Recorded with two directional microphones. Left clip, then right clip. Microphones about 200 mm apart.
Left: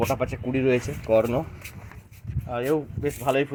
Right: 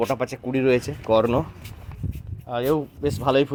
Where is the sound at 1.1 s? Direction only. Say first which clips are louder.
Right 2 dB; 35° right (ahead or behind).